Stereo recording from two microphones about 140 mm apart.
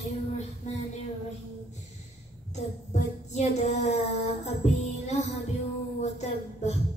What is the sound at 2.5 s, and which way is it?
Child singing, 55° left (ahead or behind).